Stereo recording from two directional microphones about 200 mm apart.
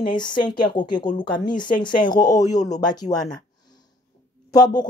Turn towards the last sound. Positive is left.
turn(degrees=20)  # may be behind; listen again after turning